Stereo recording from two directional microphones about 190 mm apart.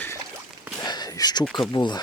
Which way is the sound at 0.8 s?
20° left (ahead or behind).